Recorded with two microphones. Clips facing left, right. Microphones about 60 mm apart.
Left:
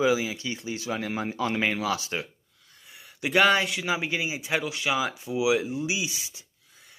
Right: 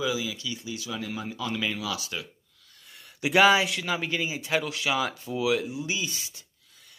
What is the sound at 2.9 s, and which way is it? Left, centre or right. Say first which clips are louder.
Speech: right 1 dB; centre.